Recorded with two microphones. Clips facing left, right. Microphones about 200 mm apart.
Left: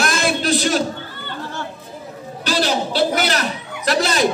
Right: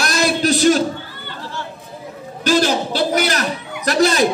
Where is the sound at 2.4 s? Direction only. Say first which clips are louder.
Right 4 dB; 45° right (ahead or behind).